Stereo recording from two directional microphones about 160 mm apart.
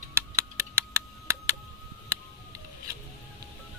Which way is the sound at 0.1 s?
15° right (ahead or behind).